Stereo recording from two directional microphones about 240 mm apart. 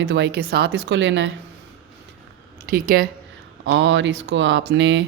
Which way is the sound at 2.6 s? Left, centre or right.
Right.